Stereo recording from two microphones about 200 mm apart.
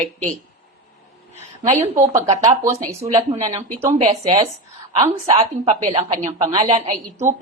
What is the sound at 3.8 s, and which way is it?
Speech, 30° right (ahead or behind).